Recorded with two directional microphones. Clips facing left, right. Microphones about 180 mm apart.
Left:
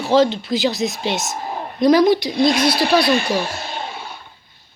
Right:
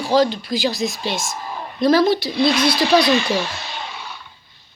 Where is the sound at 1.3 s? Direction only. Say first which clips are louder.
Left 3 dB; 50° left (ahead or behind).